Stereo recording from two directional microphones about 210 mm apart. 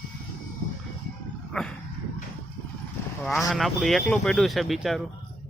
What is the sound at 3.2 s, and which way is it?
Speech, centre (ahead or behind).